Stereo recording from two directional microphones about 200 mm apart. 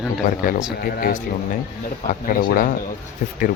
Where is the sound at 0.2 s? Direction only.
40° left (ahead or behind).